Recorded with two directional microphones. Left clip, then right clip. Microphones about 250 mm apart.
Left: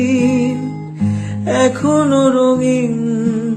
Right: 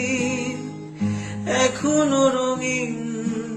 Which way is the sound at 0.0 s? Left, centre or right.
Left.